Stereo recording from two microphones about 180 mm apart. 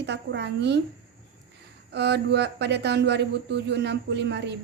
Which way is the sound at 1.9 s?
70° right (ahead or behind).